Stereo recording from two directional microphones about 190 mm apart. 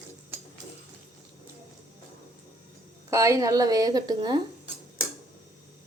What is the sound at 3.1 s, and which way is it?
Speech, 15° right (ahead or behind).